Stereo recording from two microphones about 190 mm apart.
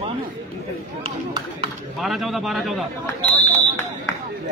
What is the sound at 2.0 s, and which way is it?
Speech, centre (ahead or behind).